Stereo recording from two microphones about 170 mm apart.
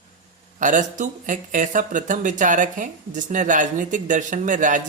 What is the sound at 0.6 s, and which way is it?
Speech, 50° right (ahead or behind).